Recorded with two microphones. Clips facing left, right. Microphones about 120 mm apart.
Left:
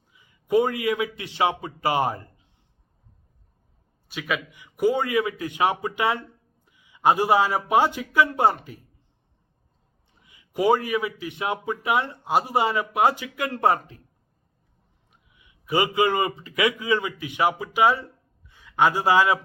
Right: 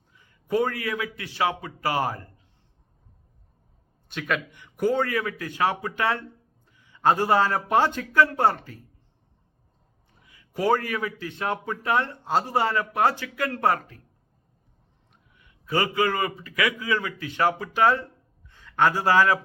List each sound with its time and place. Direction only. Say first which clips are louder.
0.1 s a man's voice: left 4 dB; 10° left (ahead or behind)
4.1 s a man's voice: even; 5° left (ahead or behind)
10.2 s a man's voice: left 3 dB; 15° left (ahead or behind)
15.1 s a man's voice: right 1 dB; 10° left (ahead or behind)